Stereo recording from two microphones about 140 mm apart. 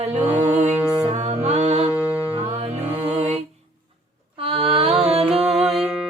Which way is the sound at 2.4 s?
45° right (ahead or behind).